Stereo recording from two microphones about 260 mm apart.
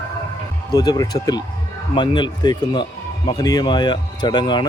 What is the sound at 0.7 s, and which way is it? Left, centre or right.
Speech, centre.